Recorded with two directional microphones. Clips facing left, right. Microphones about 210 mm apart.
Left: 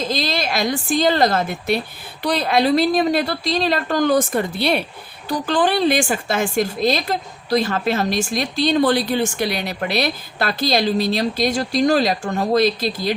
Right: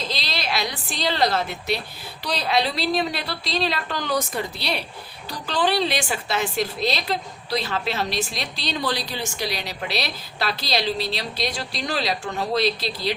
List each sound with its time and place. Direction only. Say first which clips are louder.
0.0 s a woman's voice: left 8 dB; 50° left (ahead or behind)